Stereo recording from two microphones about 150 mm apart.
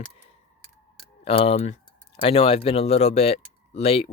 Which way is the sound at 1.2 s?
40° left (ahead or behind).